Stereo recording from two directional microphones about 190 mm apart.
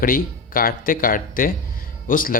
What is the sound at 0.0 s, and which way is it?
Speech, 45° left (ahead or behind).